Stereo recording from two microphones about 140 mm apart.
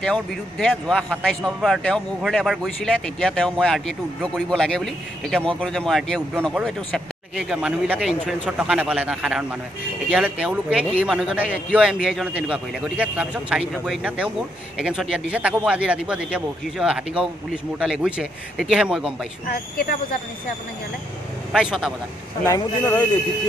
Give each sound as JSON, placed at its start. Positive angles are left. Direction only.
{"t": 0.0, "sound": "a man's voice", "side_deg": 5}
{"t": 19.4, "sound": "speech", "side_deg": 90}
{"t": 21.5, "sound": "speech", "side_deg": -5}
{"t": 22.4, "sound": "speech", "side_deg": 20}